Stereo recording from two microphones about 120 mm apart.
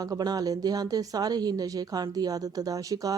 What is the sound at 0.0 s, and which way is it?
Speech, 30° right (ahead or behind).